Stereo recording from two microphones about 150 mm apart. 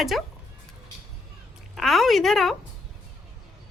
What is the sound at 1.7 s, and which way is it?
Speech, centre (ahead or behind).